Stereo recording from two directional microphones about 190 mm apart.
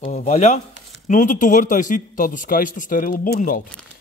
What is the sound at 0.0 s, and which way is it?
Speech, 35° left (ahead or behind).